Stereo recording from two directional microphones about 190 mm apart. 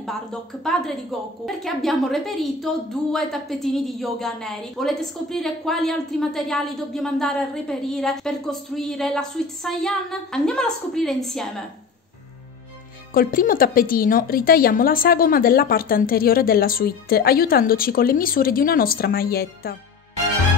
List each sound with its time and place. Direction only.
0.0 s a woman's voice: centre (ahead or behind)
13.1 s a woman's voice: 50° left (ahead or behind)